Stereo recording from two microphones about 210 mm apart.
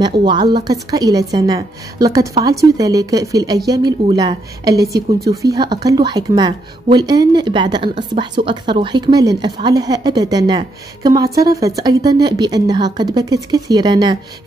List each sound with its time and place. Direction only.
0.0 s a woman's voice: 20° right (ahead or behind)